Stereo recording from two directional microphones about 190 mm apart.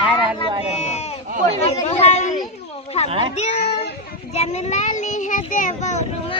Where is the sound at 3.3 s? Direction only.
35° left (ahead or behind).